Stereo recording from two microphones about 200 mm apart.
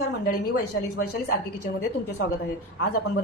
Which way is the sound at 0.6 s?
55° left (ahead or behind).